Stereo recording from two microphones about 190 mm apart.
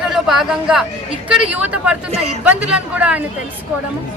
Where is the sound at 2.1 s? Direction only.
35° right (ahead or behind).